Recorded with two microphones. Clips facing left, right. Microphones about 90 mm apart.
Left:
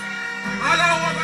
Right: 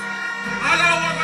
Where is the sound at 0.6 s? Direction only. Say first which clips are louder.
Left 1 dB; 15° left (ahead or behind).